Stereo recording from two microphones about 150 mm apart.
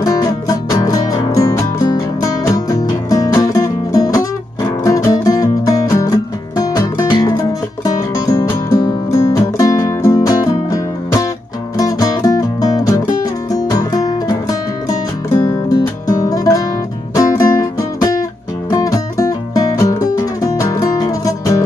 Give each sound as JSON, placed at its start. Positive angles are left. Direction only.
{"t": 0.0, "sound": "music", "side_deg": 25}